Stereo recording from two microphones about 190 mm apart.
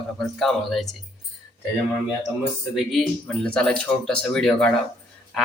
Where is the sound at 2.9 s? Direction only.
5° left (ahead or behind).